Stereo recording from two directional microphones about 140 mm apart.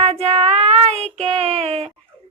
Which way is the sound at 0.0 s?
45° right (ahead or behind).